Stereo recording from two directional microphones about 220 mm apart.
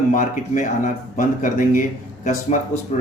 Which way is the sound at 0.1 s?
35° left (ahead or behind).